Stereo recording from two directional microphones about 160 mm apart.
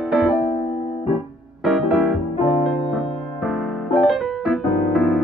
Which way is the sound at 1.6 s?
Centre (ahead or behind).